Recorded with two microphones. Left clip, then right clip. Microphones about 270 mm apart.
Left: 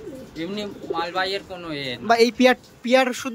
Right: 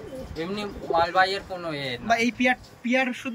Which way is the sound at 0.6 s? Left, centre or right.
Centre.